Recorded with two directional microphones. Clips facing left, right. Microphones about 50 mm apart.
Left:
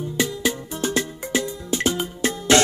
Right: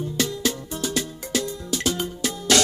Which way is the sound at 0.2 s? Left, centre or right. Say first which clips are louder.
Left 2 dB; centre.